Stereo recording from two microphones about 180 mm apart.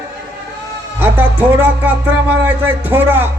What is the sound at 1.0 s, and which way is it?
Speech, 10° right (ahead or behind).